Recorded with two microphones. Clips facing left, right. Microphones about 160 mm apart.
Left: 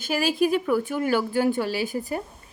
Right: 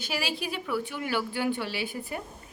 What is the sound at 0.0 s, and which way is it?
A woman's voice, 45° left (ahead or behind).